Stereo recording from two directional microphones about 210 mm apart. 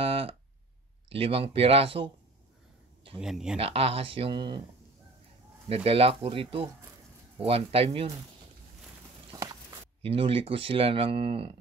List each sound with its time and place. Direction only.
0.0 s a sound: 25° right (ahead or behind)
1.0 s speech: 25° right (ahead or behind)
3.2 s speech: centre (ahead or behind)
3.5 s speech: 30° right (ahead or behind)
5.9 s speech: 30° right (ahead or behind)
9.3 s a sound: 20° right (ahead or behind)
10.0 s speech: 25° right (ahead or behind)